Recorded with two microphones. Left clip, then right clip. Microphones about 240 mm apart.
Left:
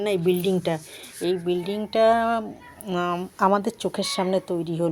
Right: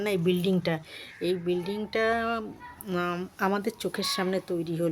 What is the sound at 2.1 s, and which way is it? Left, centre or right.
Speech, centre.